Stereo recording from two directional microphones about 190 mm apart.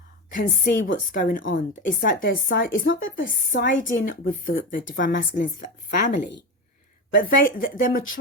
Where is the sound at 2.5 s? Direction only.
70° left (ahead or behind); by 3.1 s 90° left.